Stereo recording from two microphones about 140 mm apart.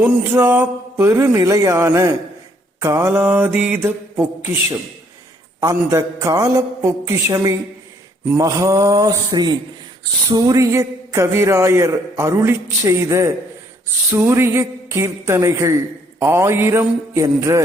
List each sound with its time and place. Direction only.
0.0 s a man's voice: 15° right (ahead or behind)
5.5 s a man's voice: 20° right (ahead or behind)